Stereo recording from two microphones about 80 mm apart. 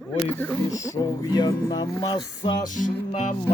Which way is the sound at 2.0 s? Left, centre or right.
Left.